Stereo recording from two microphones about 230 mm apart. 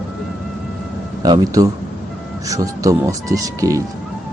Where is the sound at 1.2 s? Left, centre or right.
Centre.